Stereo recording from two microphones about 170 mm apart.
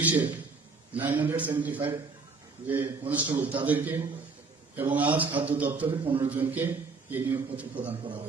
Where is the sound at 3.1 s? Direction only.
10° right (ahead or behind).